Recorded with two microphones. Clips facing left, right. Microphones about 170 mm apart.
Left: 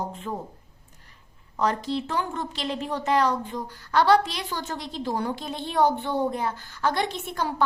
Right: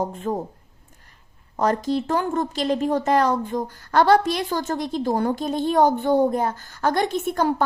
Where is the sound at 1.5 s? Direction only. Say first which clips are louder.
Right 4 dB; 45° right (ahead or behind).